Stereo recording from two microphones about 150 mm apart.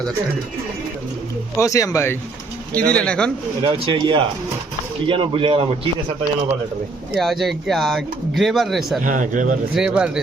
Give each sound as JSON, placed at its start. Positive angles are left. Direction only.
{"t": 1.6, "sound": "speech", "side_deg": 20}
{"t": 2.7, "sound": "speech", "side_deg": 10}
{"t": 3.6, "sound": "a man's voice", "side_deg": -30}
{"t": 7.1, "sound": "speech", "side_deg": 0}
{"t": 9.0, "sound": "a man's voice", "side_deg": -60}
{"t": 9.7, "sound": "speech", "side_deg": -5}